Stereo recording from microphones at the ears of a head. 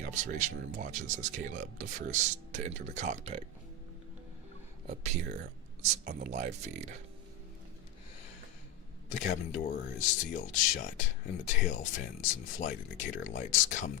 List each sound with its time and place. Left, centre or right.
0.0 s speech: right
4.9 s speech: right
9.0 s speech: left